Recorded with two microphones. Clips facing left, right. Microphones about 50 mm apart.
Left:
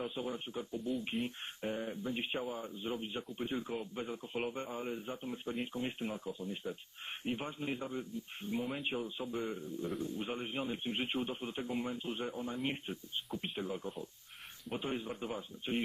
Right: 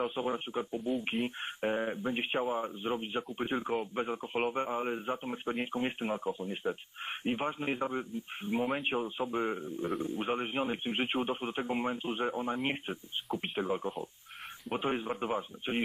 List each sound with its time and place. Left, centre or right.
0.1 s speech: right